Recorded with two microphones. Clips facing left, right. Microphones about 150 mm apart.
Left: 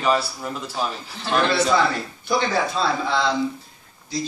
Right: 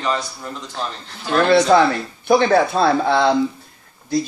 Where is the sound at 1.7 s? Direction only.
55° right (ahead or behind).